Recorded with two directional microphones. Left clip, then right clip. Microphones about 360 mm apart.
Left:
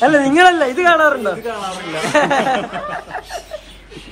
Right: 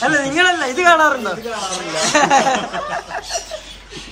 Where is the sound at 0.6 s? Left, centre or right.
Centre.